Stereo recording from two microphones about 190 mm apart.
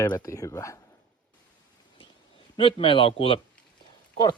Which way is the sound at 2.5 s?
30° left (ahead or behind).